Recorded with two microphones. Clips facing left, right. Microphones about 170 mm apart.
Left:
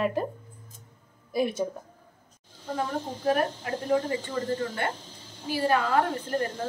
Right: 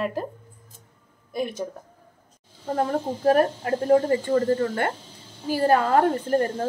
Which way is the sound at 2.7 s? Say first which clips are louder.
Right 6 dB; 45° right (ahead or behind).